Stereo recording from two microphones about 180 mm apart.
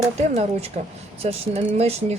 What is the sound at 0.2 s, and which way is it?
A woman's voice, 35° right (ahead or behind).